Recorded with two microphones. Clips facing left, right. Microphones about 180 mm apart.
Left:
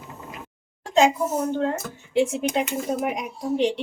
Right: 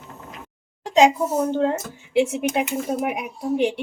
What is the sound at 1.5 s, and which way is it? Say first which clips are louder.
Speech: right 3 dB; 25° right (ahead or behind).